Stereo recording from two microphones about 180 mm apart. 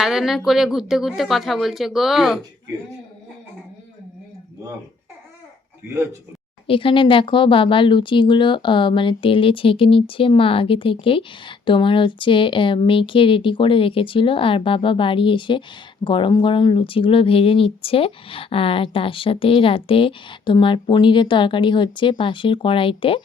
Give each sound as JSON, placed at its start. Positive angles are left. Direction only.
{"t": 0.0, "sound": "a woman's voice", "side_deg": 0}
{"t": 6.7, "sound": "speech", "side_deg": 30}